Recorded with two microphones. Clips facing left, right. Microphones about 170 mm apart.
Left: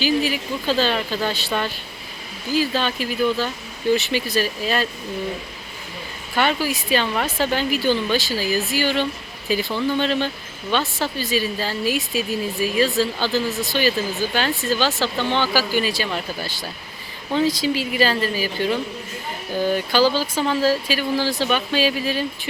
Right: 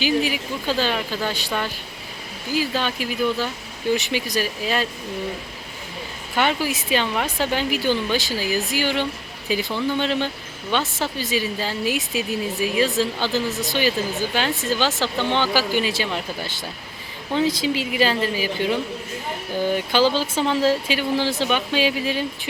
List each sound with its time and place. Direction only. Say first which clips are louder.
0.0 s speech: left 1 dB; 15° right (ahead or behind)
6.3 s a woman's voice: left 1 dB; 15° right (ahead or behind)